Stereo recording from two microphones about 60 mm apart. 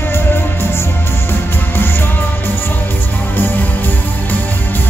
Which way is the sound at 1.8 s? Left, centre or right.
Left.